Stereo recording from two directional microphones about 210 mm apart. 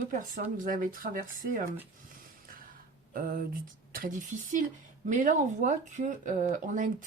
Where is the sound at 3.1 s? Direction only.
45° right (ahead or behind).